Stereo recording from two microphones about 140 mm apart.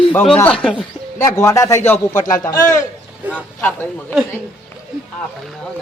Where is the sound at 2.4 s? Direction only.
20° left (ahead or behind).